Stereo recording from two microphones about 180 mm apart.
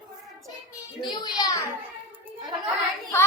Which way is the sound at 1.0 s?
25° left (ahead or behind).